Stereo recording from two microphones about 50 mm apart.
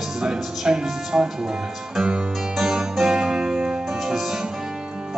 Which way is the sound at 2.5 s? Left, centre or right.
Centre.